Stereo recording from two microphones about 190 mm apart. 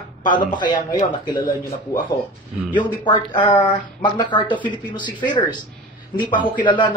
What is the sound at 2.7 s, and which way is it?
Speech, 25° left (ahead or behind).